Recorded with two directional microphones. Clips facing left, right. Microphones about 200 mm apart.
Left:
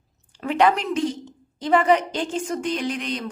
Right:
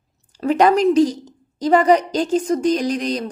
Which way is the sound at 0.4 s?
40° right (ahead or behind).